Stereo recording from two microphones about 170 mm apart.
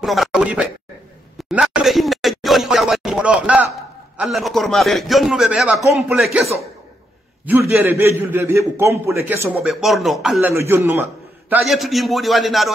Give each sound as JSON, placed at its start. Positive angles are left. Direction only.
{"t": 0.0, "sound": "a sound", "side_deg": 0}
{"t": 4.2, "sound": "a man's voice", "side_deg": 0}
{"t": 7.4, "sound": "a man's voice", "side_deg": -10}
{"t": 9.6, "sound": "a man's voice", "side_deg": 0}
{"t": 10.4, "sound": "a man's voice", "side_deg": -15}